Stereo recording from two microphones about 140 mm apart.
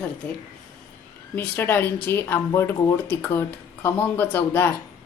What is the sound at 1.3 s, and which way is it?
Speech, 15° left (ahead or behind).